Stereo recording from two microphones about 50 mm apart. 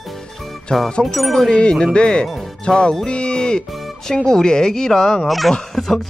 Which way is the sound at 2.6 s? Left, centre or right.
Centre.